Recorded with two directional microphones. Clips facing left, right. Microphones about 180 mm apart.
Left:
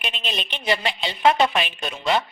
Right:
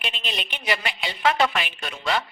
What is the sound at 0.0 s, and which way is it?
A woman's voice, 20° left (ahead or behind).